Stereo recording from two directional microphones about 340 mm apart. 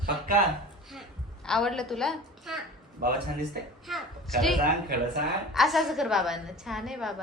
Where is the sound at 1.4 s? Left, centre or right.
Centre.